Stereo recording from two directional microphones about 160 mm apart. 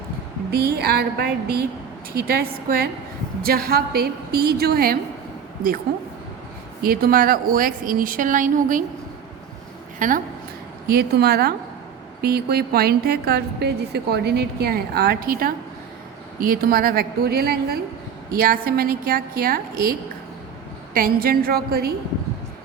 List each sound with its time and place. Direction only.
0.5 s a woman's voice: 80° right
6.8 s a woman's voice: 70° right (ahead or behind)
10.0 s a woman's voice: 55° right (ahead or behind)
10.8 s a woman's voice: 75° right (ahead or behind)